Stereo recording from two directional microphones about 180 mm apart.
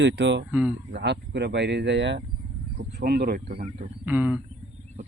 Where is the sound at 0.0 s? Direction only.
80° right.